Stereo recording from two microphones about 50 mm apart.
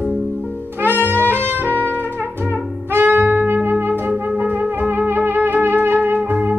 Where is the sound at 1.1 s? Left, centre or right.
Right.